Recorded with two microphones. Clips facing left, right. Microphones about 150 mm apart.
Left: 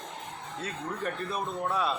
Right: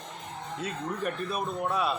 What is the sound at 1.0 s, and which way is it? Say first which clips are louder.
Speech: right 1 dB; 15° right (ahead or behind).